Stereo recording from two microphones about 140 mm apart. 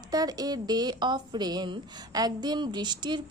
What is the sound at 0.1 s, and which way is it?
A woman's voice, 25° right (ahead or behind).